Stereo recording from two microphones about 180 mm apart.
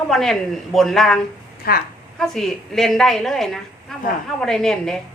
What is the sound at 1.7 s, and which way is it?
Speech, 55° left (ahead or behind).